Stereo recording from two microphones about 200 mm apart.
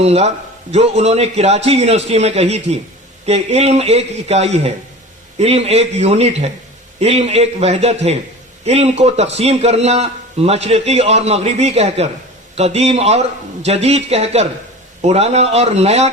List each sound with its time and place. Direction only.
0.0 s a man's voice: 30° right (ahead or behind)